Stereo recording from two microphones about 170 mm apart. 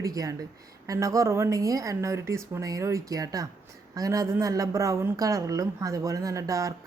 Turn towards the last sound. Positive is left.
turn(degrees=-20)  # may be behind; listen again after turning